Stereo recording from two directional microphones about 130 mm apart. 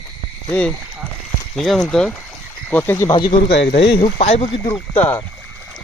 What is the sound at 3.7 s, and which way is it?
Speech, 55° left (ahead or behind).